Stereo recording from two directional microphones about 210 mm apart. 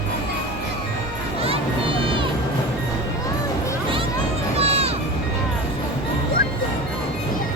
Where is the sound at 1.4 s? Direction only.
25° right (ahead or behind).